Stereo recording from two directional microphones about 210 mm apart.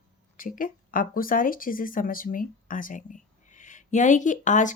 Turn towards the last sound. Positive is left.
turn(degrees=35)  # may be behind; listen again after turning